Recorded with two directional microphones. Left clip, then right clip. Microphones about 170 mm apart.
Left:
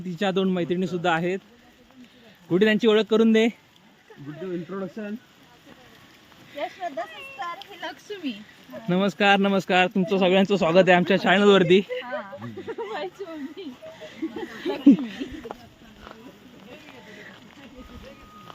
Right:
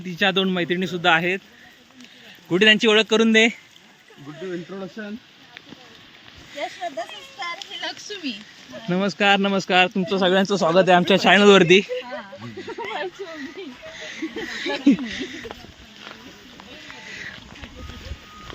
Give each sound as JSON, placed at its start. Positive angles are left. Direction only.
{"t": 0.0, "sound": "speech", "side_deg": 5}
{"t": 2.5, "sound": "speech", "side_deg": 10}
{"t": 6.6, "sound": "speech", "side_deg": 0}
{"t": 11.1, "sound": "speech", "side_deg": -10}
{"t": 12.6, "sound": "a sound", "side_deg": -30}
{"t": 14.6, "sound": "speech", "side_deg": 35}